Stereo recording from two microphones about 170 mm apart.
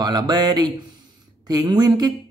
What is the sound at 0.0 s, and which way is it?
Speech, 25° right (ahead or behind).